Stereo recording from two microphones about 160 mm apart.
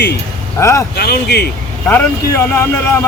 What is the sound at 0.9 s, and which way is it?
Speech, 90° left.